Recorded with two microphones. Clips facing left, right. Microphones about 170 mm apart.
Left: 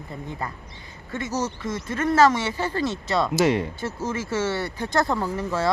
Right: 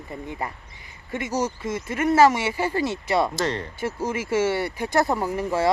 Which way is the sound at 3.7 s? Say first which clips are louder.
Right 2 dB; 10° right (ahead or behind).